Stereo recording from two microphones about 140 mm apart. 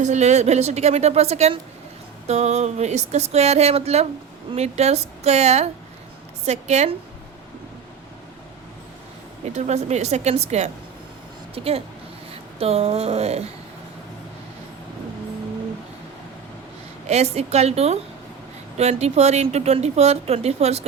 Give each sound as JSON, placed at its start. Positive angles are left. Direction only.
{"t": 0.0, "sound": "speech", "side_deg": -55}
{"t": 9.5, "sound": "speech", "side_deg": -50}
{"t": 17.1, "sound": "speech", "side_deg": -50}